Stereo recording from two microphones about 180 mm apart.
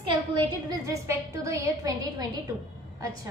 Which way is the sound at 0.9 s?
15° right (ahead or behind).